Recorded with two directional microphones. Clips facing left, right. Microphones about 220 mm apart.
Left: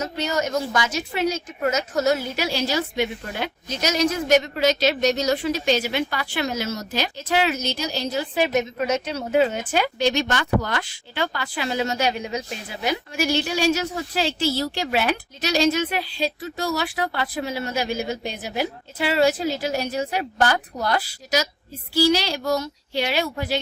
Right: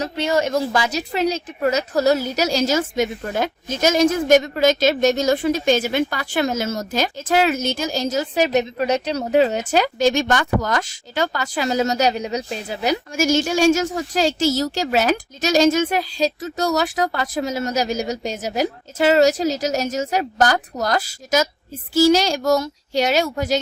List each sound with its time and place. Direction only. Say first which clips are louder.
0.0 s a woman's voice: right 4 dB; 30° right (ahead or behind)